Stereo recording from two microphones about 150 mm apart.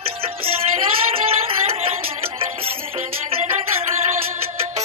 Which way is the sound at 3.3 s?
40° right (ahead or behind).